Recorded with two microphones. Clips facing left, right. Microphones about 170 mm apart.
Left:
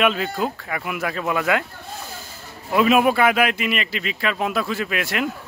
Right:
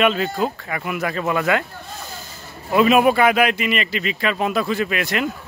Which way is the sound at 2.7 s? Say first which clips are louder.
Right 2 dB; centre (ahead or behind).